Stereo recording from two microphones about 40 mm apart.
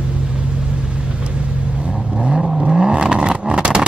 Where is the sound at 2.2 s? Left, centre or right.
Centre.